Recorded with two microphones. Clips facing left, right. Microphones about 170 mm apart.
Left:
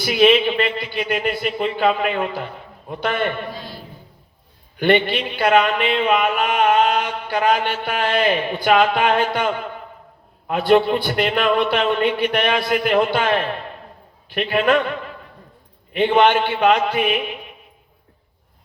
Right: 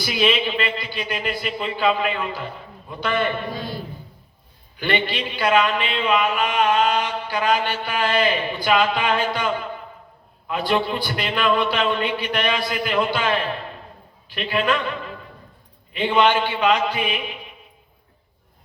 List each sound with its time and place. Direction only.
0.0 s a man's voice: 55° left (ahead or behind)
4.8 s a man's voice: 55° left (ahead or behind)